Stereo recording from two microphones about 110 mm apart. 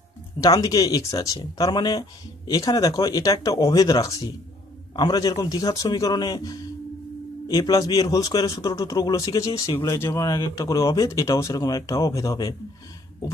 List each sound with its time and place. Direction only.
0.4 s speech: 35° left (ahead or behind)